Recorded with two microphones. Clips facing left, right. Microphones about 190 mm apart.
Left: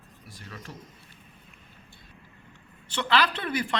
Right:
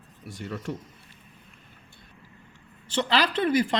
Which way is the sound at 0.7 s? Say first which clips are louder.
Right 11 dB; 65° right (ahead or behind).